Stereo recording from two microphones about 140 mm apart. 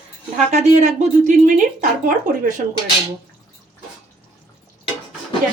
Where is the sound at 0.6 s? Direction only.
60° right (ahead or behind).